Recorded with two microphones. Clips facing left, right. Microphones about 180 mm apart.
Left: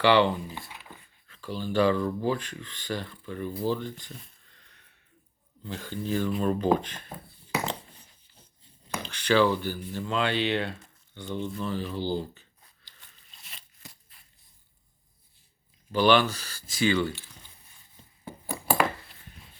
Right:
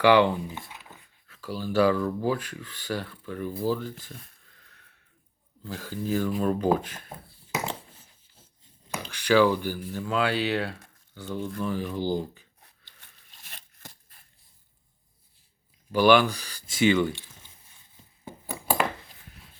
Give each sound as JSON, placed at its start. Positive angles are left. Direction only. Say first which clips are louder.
{"t": 0.0, "sound": "speech", "louder": "right 2 dB", "side_deg": -10}
{"t": 0.6, "sound": "speech", "louder": "even", "side_deg": -5}
{"t": 3.6, "sound": "a sound", "louder": "right 1 dB", "side_deg": -5}
{"t": 5.6, "sound": "speech", "louder": "right 1 dB", "side_deg": -5}
{"t": 7.6, "sound": "a sound", "louder": "left 1 dB", "side_deg": -5}
{"t": 8.9, "sound": "speech", "louder": "right 2 dB", "side_deg": -10}
{"t": 15.9, "sound": "speech", "louder": "right 2 dB", "side_deg": -10}